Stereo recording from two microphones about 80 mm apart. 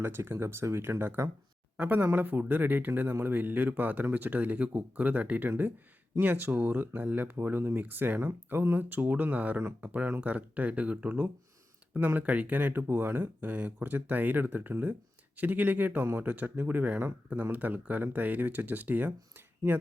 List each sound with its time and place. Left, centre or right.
0.0 s speech: right